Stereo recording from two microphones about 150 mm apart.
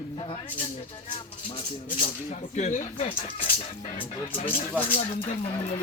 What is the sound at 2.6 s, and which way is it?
Speech, 50° left (ahead or behind).